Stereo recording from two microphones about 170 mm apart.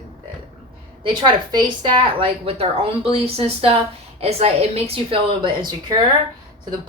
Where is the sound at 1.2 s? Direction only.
25° right (ahead or behind).